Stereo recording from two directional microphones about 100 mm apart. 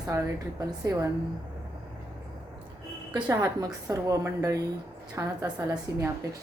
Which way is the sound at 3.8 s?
30° right (ahead or behind).